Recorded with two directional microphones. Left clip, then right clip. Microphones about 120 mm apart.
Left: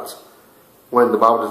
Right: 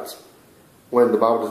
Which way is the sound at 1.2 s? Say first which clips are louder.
Left 4 dB; 10° right (ahead or behind).